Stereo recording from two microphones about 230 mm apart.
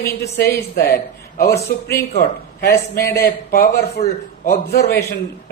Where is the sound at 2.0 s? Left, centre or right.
Left.